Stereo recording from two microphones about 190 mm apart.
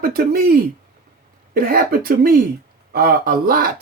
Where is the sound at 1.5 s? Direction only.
50° right (ahead or behind).